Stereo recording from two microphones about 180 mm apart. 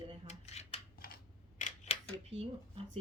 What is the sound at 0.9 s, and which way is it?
Camera, 55° left (ahead or behind).